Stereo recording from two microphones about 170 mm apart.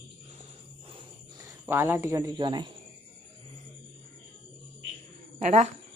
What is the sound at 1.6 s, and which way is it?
Speech, 15° right (ahead or behind).